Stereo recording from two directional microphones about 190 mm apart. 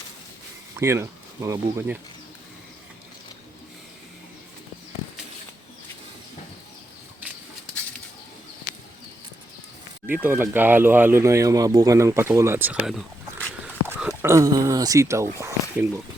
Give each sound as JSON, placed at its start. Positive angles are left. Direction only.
{"t": 0.8, "sound": "speech", "side_deg": -15}
{"t": 10.1, "sound": "speech", "side_deg": -10}